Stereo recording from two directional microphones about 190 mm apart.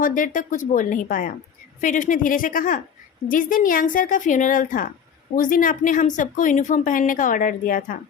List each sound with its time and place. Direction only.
0.0 s a woman's voice: 45° left (ahead or behind)